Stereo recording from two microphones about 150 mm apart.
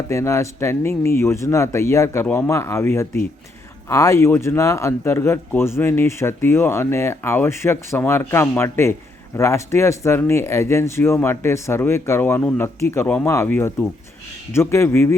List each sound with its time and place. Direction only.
0.1 s speech: 20° left (ahead or behind)